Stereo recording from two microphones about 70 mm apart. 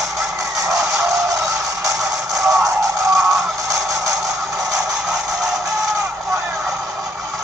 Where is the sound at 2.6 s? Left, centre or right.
Right.